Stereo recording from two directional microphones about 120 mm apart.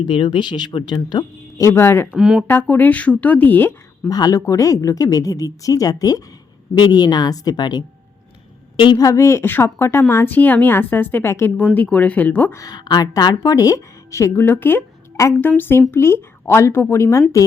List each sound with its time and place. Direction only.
0.0 s speech: 40° left (ahead or behind); by 2.1 s 20° left (ahead or behind)
2.1 s speech: 5° right (ahead or behind)
2.5 s a woman's voice: 15° left (ahead or behind)
4.1 s a woman's voice: 30° left (ahead or behind); by 12.5 s 15° left (ahead or behind)
12.5 s a woman's voice: 30° left (ahead or behind)